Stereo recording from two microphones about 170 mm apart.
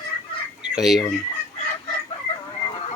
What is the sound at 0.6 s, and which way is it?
Fowl, 5° right (ahead or behind).